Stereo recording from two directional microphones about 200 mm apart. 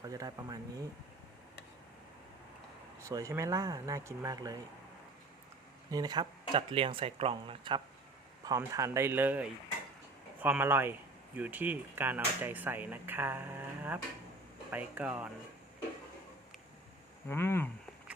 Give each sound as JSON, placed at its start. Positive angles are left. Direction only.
{"t": 0.0, "sound": "speech", "side_deg": -20}
{"t": 3.0, "sound": "speech", "side_deg": -15}
{"t": 5.9, "sound": "speech", "side_deg": -20}
{"t": 17.2, "sound": "speech", "side_deg": 10}